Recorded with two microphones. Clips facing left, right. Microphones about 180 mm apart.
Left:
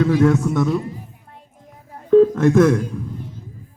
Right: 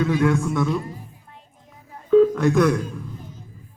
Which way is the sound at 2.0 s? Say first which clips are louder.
Left 3 dB; 30° left (ahead or behind).